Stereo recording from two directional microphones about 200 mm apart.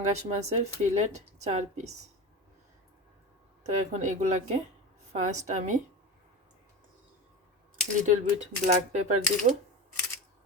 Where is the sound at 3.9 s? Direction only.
35° right (ahead or behind).